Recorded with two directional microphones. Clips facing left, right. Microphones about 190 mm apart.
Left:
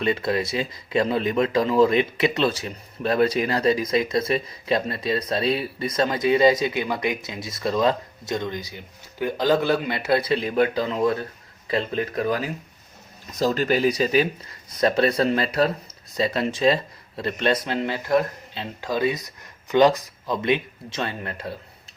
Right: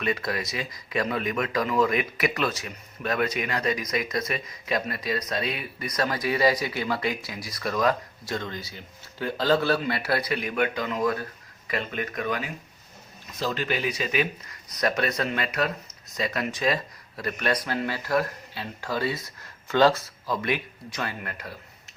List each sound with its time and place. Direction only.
0.0 s speech: 30° left (ahead or behind)